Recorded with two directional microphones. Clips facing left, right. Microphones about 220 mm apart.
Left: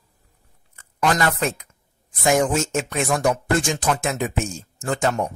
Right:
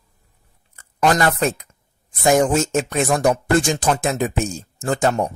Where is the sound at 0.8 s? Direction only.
40° right (ahead or behind).